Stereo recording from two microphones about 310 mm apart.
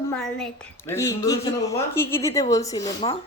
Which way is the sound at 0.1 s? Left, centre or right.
Centre.